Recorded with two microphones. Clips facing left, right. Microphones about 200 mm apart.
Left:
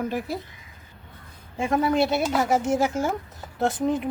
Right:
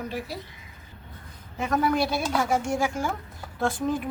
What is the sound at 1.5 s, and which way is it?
Speech, 25° left (ahead or behind).